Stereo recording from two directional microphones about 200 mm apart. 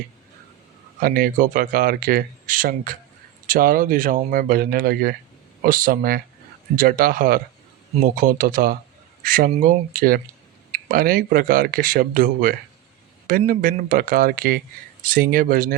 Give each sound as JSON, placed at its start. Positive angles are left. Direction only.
{"t": 0.9, "sound": "speech", "side_deg": -45}